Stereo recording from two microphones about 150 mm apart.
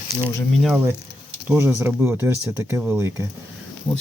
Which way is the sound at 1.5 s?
15° right (ahead or behind).